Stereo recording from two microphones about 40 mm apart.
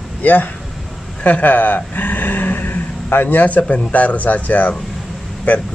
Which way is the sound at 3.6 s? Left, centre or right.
Left.